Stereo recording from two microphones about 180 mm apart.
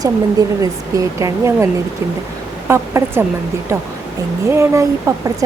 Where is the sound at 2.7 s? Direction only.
15° right (ahead or behind).